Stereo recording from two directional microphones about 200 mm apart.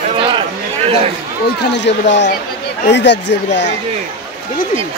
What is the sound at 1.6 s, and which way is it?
Speech, 60° left (ahead or behind).